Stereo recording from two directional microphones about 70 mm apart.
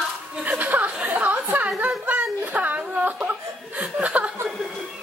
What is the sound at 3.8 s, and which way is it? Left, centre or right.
Chuckle, centre.